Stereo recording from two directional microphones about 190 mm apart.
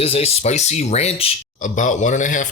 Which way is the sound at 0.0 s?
30° left (ahead or behind).